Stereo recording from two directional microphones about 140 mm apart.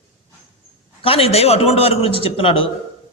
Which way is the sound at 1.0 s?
45° left (ahead or behind).